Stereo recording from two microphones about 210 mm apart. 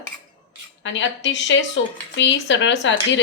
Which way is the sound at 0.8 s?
60° left (ahead or behind).